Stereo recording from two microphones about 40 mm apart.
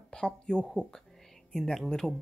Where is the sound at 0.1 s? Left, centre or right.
Centre.